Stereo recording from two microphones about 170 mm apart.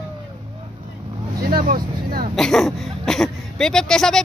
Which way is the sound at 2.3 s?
Centre (ahead or behind).